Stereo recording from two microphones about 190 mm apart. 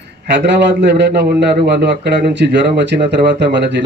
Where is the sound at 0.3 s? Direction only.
65° right (ahead or behind).